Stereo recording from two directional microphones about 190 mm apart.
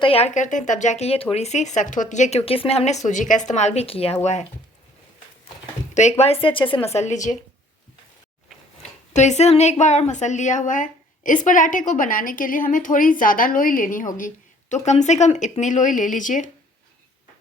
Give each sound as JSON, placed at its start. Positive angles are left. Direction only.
{"t": 0.0, "sound": "speech", "side_deg": 30}
{"t": 5.9, "sound": "speech", "side_deg": 40}
{"t": 8.8, "sound": "a woman's voice", "side_deg": 35}